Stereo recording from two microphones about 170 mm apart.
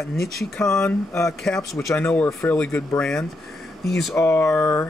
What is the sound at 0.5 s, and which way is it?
Speech, 15° left (ahead or behind).